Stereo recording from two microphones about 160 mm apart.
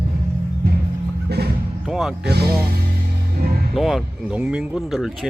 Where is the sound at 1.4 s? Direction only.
85° right.